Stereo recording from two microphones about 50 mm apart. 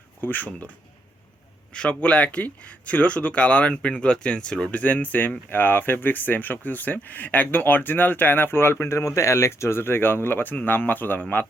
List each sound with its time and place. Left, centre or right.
0.2 s speech: left
1.7 s speech: left
4.8 s speech: left